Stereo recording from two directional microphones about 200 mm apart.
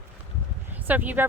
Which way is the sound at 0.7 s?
10° right (ahead or behind).